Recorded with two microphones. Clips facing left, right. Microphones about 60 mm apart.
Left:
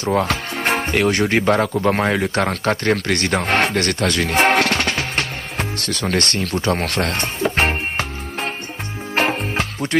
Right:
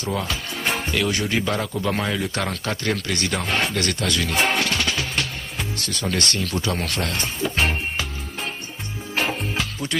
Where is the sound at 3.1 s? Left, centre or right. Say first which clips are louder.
Left 6 dB; left.